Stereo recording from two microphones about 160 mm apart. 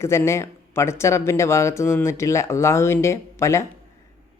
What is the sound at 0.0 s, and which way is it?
Speech, 15° left (ahead or behind).